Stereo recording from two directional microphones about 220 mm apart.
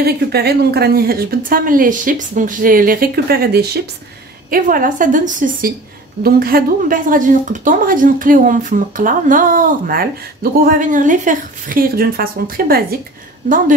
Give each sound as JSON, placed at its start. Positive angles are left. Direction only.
{"t": 0.0, "sound": "a woman's voice", "side_deg": -45}